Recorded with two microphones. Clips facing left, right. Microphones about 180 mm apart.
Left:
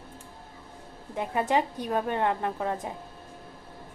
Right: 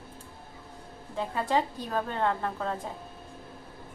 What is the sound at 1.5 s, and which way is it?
A woman's voice, 20° left (ahead or behind).